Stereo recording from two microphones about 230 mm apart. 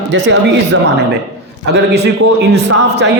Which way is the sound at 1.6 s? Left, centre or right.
Right.